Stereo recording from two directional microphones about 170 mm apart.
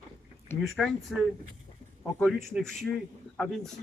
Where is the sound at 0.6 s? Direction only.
Centre (ahead or behind).